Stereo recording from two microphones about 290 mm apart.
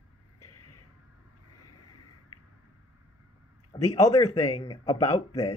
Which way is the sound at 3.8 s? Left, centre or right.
Centre.